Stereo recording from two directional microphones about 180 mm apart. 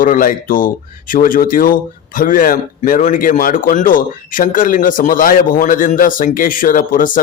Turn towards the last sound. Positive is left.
turn(degrees=50)  # may be behind; listen again after turning